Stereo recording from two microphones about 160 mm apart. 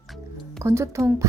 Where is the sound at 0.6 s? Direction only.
15° right (ahead or behind).